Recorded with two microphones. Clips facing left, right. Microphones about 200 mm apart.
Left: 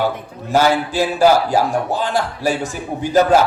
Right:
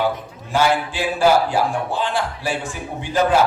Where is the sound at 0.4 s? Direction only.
40° left (ahead or behind).